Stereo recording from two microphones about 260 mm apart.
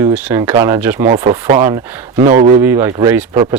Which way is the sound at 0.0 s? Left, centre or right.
Centre.